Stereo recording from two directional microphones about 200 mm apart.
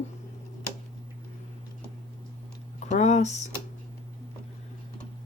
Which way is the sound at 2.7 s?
35° left (ahead or behind).